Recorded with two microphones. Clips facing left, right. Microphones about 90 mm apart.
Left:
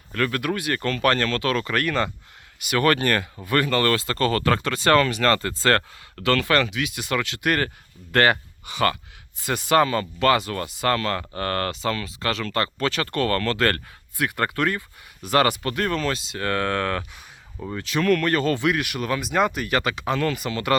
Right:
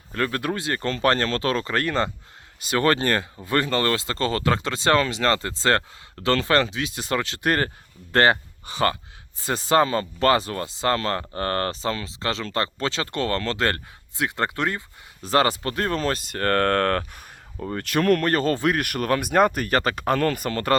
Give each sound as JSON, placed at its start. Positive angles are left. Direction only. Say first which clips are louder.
{"t": 0.1, "sound": "speech", "louder": "left 1 dB", "side_deg": -30}
{"t": 17.0, "sound": "speech", "louder": "right 2 dB", "side_deg": -40}